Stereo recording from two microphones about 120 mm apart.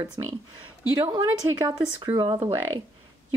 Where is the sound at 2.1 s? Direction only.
35° right (ahead or behind).